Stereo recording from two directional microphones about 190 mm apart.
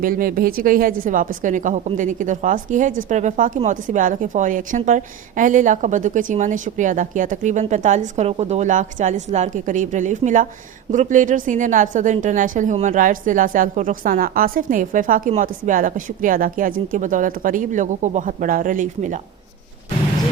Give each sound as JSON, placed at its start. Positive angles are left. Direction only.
{"t": 0.0, "sound": "a woman's voice", "side_deg": -50}